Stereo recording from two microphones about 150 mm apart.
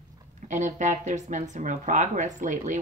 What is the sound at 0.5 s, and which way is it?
Speech, 55° right (ahead or behind).